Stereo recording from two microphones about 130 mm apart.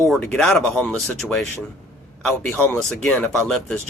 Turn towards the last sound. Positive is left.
turn(degrees=5)  # may be behind; listen again after turning